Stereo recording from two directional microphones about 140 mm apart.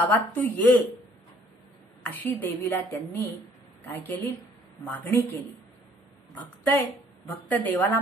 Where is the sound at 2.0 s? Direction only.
15° left (ahead or behind).